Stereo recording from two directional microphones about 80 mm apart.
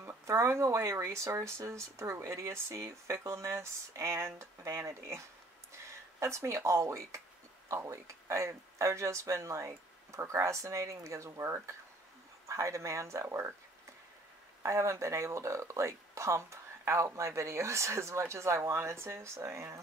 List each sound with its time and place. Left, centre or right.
0.0 s speech: right
14.6 s speech: right